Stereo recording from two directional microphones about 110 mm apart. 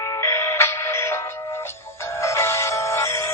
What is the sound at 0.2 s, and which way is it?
Music, 25° left (ahead or behind).